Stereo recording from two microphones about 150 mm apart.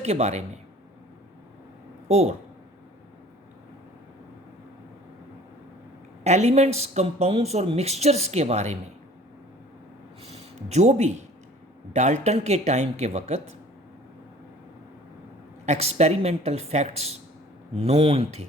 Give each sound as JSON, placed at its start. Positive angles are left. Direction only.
{"t": 0.0, "sound": "speech", "side_deg": -45}
{"t": 2.0, "sound": "speech", "side_deg": -45}
{"t": 6.2, "sound": "speech", "side_deg": -50}
{"t": 10.2, "sound": "speech", "side_deg": -45}
{"t": 15.6, "sound": "speech", "side_deg": -45}